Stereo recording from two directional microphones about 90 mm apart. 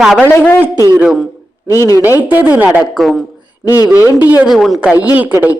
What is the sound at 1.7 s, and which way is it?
Speech, 35° left (ahead or behind).